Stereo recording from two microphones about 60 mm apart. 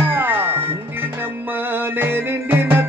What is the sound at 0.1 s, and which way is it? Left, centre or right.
Music, right.